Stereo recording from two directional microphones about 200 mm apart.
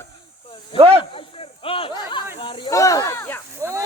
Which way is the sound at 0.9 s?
25° left (ahead or behind).